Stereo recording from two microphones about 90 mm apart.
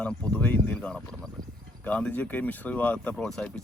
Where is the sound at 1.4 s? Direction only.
50° right (ahead or behind).